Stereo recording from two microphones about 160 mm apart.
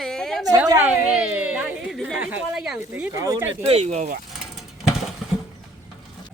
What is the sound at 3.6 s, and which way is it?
Speech, 40° right (ahead or behind).